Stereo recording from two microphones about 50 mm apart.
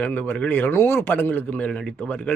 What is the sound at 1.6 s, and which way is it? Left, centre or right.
Speech, left.